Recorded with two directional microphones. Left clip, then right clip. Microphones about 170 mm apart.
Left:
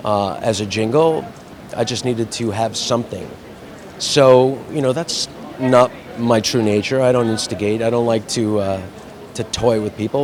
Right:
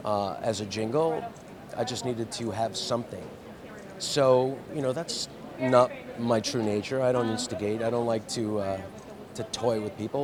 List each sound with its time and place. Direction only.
0.0 s a man's voice: 20° left (ahead or behind)
4.0 s a man's voice: 30° left (ahead or behind)